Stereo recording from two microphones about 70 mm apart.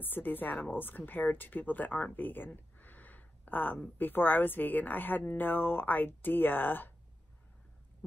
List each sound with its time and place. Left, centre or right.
0.0 s speech: left